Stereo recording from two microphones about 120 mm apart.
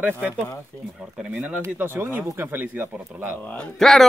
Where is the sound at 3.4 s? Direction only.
10° left (ahead or behind).